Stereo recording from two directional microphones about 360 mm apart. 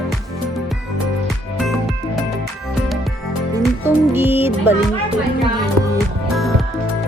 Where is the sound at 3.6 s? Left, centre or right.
Centre.